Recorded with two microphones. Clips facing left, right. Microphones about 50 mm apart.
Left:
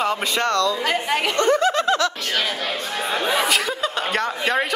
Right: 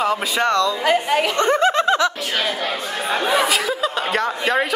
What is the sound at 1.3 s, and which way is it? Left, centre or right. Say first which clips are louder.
Snicker: even; right.